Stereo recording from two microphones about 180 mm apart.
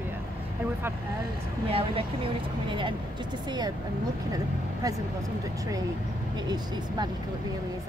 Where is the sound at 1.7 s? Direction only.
30° right (ahead or behind).